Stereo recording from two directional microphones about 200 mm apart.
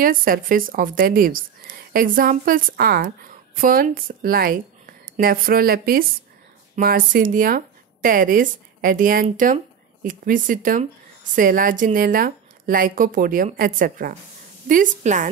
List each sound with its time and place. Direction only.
0.0 s a woman's voice: 45° right (ahead or behind)